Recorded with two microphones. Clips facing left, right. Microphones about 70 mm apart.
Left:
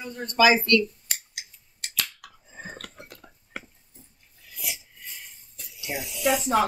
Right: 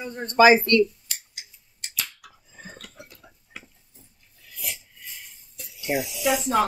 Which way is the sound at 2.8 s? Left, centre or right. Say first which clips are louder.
Left 2 dB; left.